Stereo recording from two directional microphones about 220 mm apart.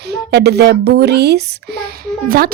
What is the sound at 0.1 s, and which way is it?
A child's voice, 50° right (ahead or behind).